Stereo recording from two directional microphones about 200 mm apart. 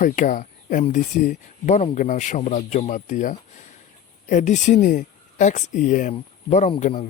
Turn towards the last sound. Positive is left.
turn(degrees=35)  # may be behind; listen again after turning